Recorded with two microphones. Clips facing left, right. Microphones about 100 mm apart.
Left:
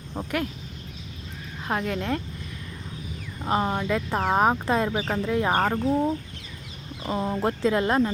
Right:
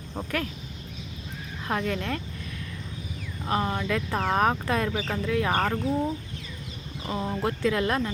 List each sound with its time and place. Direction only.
0.1 s speech: 5° left (ahead or behind)
1.6 s speech: 10° left (ahead or behind)
3.4 s speech: 25° left (ahead or behind)